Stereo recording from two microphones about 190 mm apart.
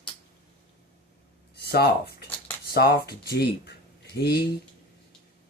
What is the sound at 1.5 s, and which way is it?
Speech, 55° left (ahead or behind).